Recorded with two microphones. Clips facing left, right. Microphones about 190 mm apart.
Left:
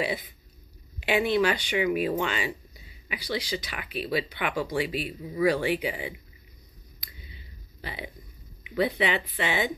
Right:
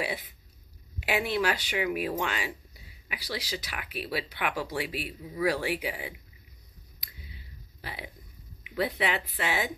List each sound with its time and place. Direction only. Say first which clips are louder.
0.9 s speech: left 5 dB; 5° right (ahead or behind)
7.0 s clicking: even; centre (ahead or behind)
8.6 s speech: left 3 dB; centre (ahead or behind)